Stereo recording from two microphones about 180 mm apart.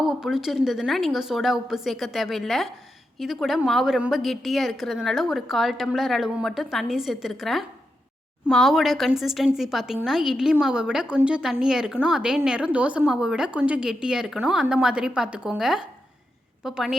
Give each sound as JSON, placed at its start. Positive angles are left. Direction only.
{"t": 0.0, "sound": "a woman's voice", "side_deg": 0}